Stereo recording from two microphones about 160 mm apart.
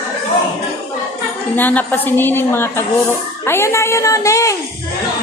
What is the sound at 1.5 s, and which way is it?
A woman's voice, 10° left (ahead or behind).